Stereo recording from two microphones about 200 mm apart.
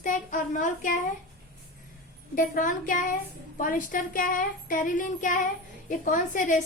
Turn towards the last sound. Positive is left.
turn(degrees=40)  # may be behind; listen again after turning